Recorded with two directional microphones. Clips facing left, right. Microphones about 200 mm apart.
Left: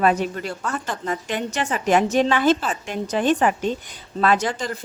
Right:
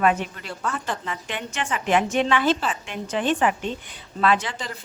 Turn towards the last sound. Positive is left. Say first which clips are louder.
# left 2 dB
turn(degrees=45)  # may be behind; listen again after turning